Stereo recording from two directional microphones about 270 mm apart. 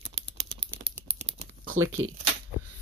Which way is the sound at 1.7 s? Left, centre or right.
Right.